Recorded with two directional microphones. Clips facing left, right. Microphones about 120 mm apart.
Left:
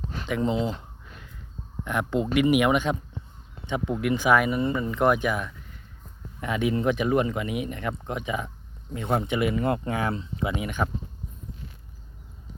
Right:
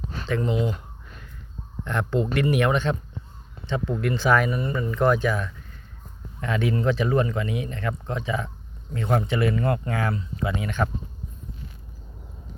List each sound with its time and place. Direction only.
0.1 s speech: 15° left (ahead or behind)
1.8 s speech: 10° left (ahead or behind)